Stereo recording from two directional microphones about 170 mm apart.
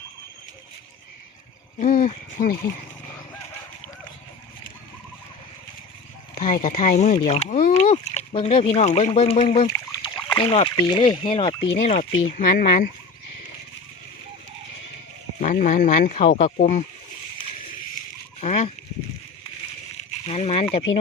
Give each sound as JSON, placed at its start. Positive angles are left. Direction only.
{"t": 1.8, "sound": "speech", "side_deg": 50}
{"t": 6.4, "sound": "speech", "side_deg": 50}
{"t": 12.4, "sound": "speech", "side_deg": 55}
{"t": 15.4, "sound": "speech", "side_deg": 50}
{"t": 18.3, "sound": "a sound", "side_deg": 40}
{"t": 20.0, "sound": "a sound", "side_deg": 40}